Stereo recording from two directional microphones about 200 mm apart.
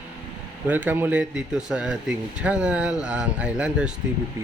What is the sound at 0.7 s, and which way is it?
Speech, 10° right (ahead or behind).